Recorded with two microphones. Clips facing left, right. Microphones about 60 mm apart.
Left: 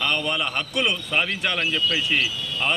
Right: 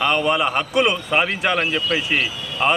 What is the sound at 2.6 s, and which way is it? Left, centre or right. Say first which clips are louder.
Speech: right 6 dB; centre.